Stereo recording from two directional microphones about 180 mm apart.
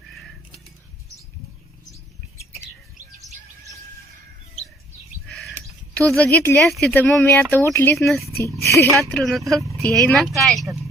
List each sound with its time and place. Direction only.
0.1 s a sound: centre (ahead or behind)
5.3 s a sound: centre (ahead or behind)
6.0 s speech: 10° left (ahead or behind)
7.9 s speech: centre (ahead or behind)
9.6 s vehicle: 15° right (ahead or behind)
9.8 s speech: 5° left (ahead or behind)